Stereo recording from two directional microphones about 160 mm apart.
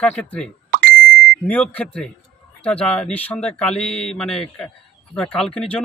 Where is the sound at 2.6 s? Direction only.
5° left (ahead or behind).